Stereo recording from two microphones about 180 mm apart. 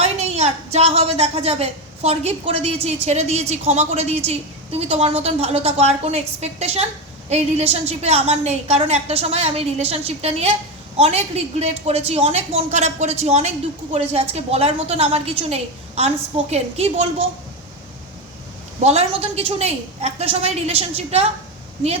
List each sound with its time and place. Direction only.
0.0 s a woman's voice: 35° right (ahead or behind)
18.8 s a woman's voice: 35° right (ahead or behind)